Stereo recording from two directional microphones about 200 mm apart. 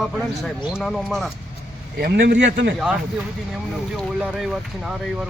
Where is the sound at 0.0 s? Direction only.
Centre (ahead or behind).